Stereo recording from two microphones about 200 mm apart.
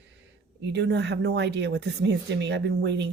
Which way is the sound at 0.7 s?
60° right (ahead or behind).